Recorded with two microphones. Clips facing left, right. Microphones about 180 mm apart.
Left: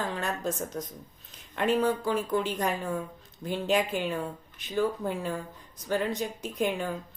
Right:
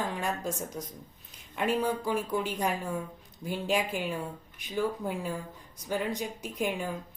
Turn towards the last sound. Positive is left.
turn(degrees=-10)  # may be behind; listen again after turning